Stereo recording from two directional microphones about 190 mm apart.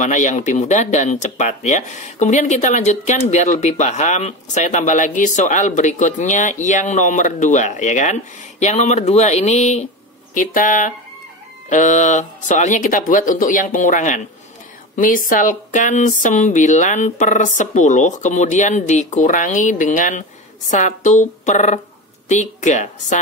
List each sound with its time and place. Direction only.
0.0 s speech: 40° left (ahead or behind)